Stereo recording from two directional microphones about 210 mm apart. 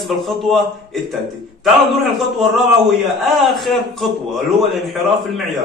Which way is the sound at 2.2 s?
Centre (ahead or behind).